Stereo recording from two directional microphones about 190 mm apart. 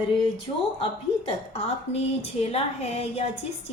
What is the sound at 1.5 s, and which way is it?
A woman's voice, 30° left (ahead or behind).